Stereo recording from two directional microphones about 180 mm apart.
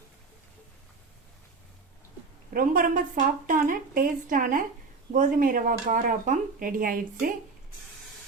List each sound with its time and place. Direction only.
2.5 s speech: 50° right (ahead or behind)